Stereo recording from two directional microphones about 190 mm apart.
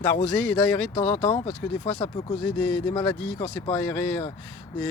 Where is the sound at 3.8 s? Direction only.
10° left (ahead or behind).